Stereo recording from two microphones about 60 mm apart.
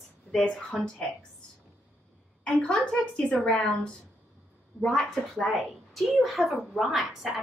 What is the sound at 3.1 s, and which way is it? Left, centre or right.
Speech, left.